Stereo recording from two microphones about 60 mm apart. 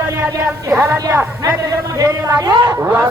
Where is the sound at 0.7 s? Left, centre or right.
Right.